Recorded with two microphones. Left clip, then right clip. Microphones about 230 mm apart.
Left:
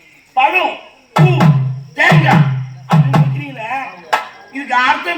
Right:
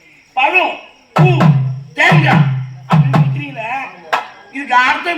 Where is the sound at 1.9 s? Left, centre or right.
Right.